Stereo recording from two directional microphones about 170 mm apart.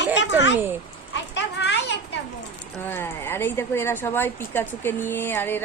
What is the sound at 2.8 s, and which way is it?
A woman's voice, 10° left (ahead or behind).